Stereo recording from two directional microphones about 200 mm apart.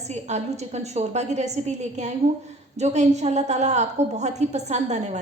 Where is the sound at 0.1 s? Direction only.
35° right (ahead or behind).